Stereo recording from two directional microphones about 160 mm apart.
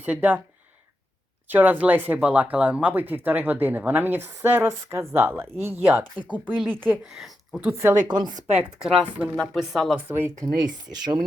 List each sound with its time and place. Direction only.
0.0 s speech: 10° right (ahead or behind)
1.5 s speech: 10° right (ahead or behind)
7.2 s speech: centre (ahead or behind)
7.8 s a woman's voice: 20° right (ahead or behind)
8.3 s speech: 50° right (ahead or behind)
8.5 s a woman's voice: 5° right (ahead or behind)
10.1 s speech: 15° right (ahead or behind)
10.9 s a woman's voice: 25° right (ahead or behind)